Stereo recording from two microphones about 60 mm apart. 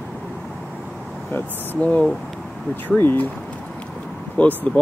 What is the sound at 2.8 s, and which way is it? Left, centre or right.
Speech, left.